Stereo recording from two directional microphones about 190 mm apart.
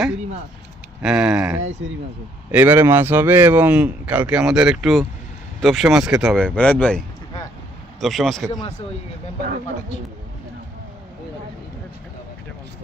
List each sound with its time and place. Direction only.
1.0 s speech: 5° right (ahead or behind)
1.8 s speech: 90° right
2.5 s speech: 10° right (ahead or behind); by 7.0 s 5° left (ahead or behind)
8.0 s speech: centre (ahead or behind)